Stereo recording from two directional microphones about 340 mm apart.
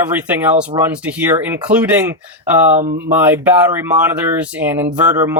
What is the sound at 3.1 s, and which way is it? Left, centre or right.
Speech, centre.